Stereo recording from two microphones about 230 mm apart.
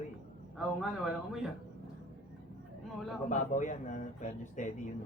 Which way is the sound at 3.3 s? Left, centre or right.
Left.